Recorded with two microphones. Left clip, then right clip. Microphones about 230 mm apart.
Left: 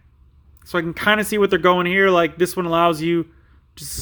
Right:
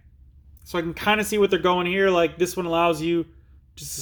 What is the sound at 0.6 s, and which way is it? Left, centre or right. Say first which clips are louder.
Speech: left 5 dB; left.